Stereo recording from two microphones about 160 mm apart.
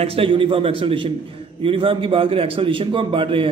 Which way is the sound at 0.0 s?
35° right (ahead or behind).